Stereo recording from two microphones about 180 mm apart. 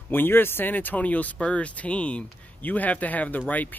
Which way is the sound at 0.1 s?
10° left (ahead or behind).